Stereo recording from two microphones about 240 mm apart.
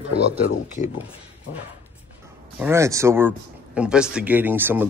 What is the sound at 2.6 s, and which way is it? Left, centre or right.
Speech, centre.